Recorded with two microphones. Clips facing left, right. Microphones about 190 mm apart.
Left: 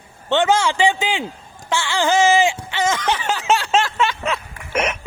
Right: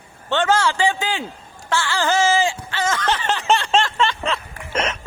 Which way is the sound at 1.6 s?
15° left (ahead or behind).